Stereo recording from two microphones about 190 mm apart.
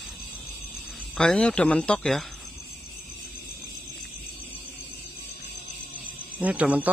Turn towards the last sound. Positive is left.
turn(degrees=-10)  # may be behind; listen again after turning